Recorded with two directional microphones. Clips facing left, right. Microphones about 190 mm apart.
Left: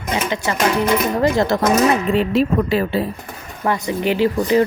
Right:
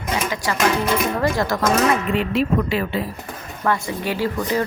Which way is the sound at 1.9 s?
35° left (ahead or behind).